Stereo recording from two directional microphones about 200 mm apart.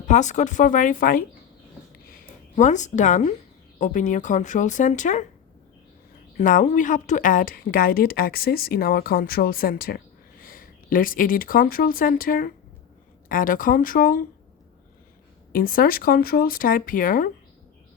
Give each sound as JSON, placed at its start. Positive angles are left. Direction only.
{"t": 0.1, "sound": "speech", "side_deg": 35}
{"t": 2.0, "sound": "a sound", "side_deg": 40}
{"t": 3.8, "sound": "speech", "side_deg": 40}
{"t": 6.3, "sound": "speech", "side_deg": 40}
{"t": 15.5, "sound": "speech", "side_deg": 45}